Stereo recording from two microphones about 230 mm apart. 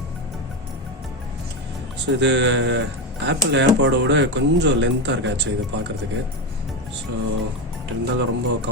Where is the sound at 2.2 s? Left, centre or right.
Right.